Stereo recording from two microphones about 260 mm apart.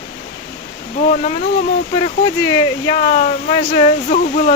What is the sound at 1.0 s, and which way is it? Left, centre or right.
Speech, left.